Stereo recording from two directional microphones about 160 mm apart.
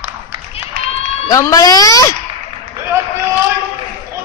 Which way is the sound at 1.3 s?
20° left (ahead or behind).